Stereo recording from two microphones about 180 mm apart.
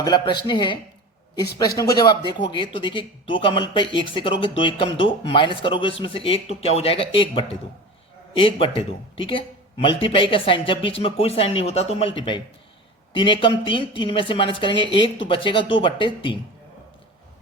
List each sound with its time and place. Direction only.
0.0 s speech: 25° left (ahead or behind)